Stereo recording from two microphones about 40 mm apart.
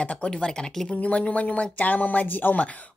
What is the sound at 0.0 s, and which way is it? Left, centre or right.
Speech, left.